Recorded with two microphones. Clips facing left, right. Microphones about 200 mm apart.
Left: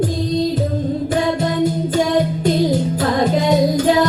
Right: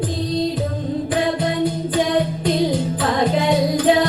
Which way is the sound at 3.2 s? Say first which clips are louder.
Left 2 dB; 45° left (ahead or behind).